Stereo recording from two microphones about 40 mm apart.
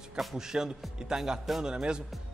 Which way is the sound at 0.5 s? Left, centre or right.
Right.